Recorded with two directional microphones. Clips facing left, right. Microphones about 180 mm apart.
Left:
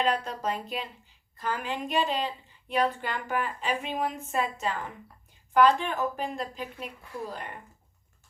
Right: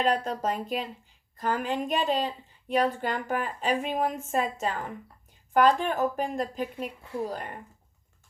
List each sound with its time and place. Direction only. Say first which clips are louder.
0.0 s a woman's voice: right 2 dB; 45° right (ahead or behind)